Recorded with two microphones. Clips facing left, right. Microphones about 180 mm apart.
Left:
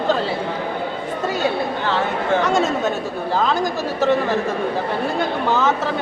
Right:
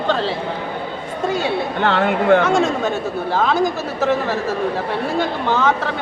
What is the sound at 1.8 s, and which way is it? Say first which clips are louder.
Speech: right 9 dB; 60° right (ahead or behind).